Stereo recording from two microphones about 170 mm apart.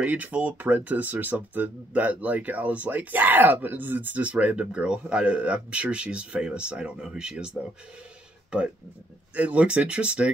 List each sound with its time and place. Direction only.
0.0 s speech: 10° right (ahead or behind)